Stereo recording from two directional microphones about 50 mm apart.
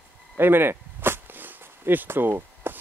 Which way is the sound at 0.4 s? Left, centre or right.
Right.